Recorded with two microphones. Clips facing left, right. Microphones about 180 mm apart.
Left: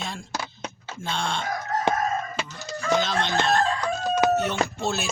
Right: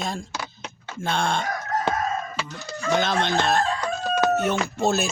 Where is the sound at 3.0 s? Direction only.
55° right (ahead or behind).